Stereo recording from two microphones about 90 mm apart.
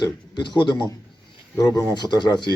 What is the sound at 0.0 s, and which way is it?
Speech, 55° left (ahead or behind).